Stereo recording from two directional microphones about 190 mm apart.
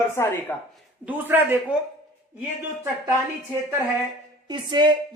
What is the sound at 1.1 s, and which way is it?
Speech, 10° right (ahead or behind).